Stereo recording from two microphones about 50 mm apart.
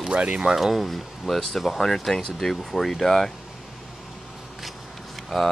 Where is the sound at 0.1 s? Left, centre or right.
Right.